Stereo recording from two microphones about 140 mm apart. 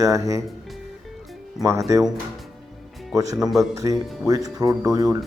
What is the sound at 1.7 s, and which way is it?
Speech, 25° right (ahead or behind).